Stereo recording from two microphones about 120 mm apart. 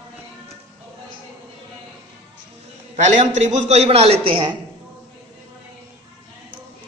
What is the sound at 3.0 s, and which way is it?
A man's voice, 75° right (ahead or behind).